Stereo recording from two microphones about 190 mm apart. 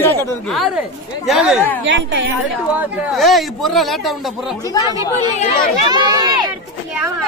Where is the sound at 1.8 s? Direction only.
80° right.